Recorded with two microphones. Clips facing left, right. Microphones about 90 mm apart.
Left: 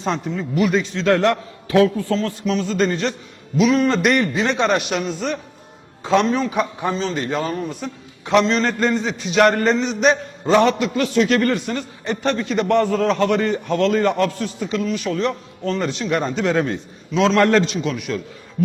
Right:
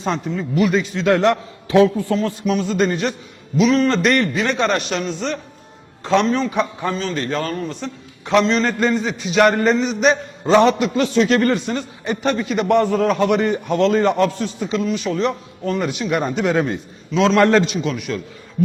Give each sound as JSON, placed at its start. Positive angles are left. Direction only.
{"t": 0.0, "sound": "a man's voice", "side_deg": 0}
{"t": 0.9, "sound": "a man's voice", "side_deg": -15}
{"t": 3.6, "sound": "a man's voice", "side_deg": 5}
{"t": 6.7, "sound": "a man's voice", "side_deg": 20}
{"t": 7.8, "sound": "a man's voice", "side_deg": 0}
{"t": 10.4, "sound": "a man's voice", "side_deg": -20}
{"t": 17.7, "sound": "a man's voice", "side_deg": 0}